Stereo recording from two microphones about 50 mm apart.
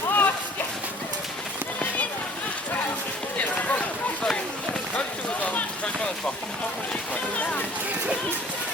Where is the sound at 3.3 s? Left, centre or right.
Left.